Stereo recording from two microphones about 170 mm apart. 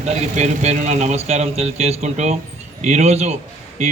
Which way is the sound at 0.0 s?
40° right (ahead or behind).